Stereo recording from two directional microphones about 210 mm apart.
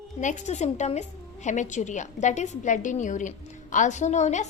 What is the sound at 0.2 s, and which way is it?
A woman's voice, 35° left (ahead or behind).